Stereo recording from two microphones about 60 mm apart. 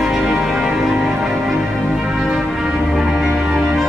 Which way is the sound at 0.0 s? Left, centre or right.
Centre.